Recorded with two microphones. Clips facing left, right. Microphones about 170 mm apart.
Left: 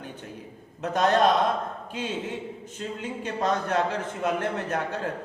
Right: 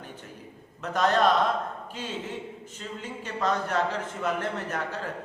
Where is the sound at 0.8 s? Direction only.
20° left (ahead or behind).